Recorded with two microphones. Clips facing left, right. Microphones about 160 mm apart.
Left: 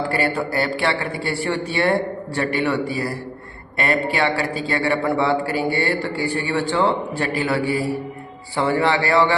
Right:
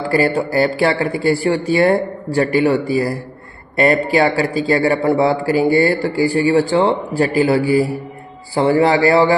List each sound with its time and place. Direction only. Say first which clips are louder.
0.1 s a man's voice: right 6 dB; 35° right (ahead or behind)